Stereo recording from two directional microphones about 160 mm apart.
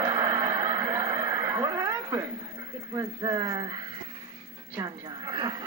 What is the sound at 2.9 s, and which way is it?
Speech, 20° right (ahead or behind).